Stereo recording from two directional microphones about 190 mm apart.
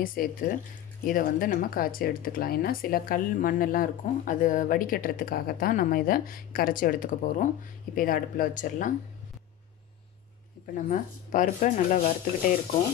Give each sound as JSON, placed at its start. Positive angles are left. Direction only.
{"t": 0.0, "sound": "speech", "side_deg": 50}
{"t": 10.7, "sound": "speech", "side_deg": 45}